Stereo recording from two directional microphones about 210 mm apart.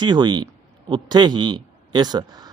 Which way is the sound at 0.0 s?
20° right (ahead or behind).